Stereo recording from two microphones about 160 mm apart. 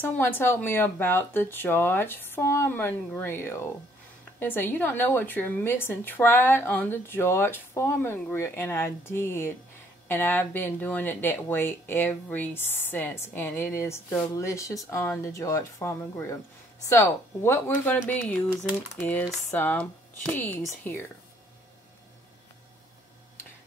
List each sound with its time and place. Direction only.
0.0 s speech: 15° left (ahead or behind)
18.9 s speech: 10° left (ahead or behind)